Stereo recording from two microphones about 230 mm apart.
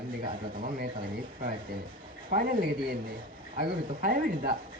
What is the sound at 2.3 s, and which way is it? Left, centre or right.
Speech, right.